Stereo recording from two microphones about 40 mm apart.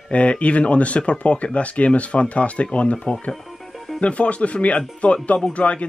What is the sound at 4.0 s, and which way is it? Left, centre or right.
Speech, left.